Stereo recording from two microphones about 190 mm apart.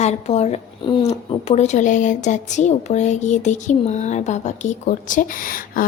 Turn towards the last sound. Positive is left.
turn(degrees=45)  # may be behind; listen again after turning